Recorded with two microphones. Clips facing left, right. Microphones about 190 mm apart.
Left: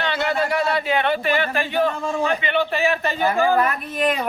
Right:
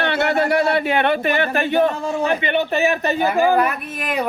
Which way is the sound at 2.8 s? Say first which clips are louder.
Right 2 dB; 20° right (ahead or behind).